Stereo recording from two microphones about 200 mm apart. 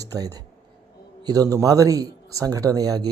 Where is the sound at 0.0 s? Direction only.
15° right (ahead or behind).